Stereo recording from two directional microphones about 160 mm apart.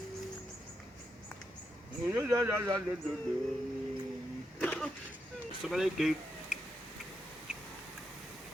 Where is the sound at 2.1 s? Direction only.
15° right (ahead or behind).